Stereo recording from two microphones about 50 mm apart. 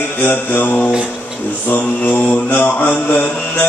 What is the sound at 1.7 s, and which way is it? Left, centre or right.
Mantra, left.